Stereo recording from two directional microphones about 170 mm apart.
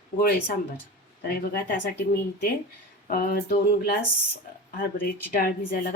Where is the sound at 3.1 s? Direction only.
60° left (ahead or behind).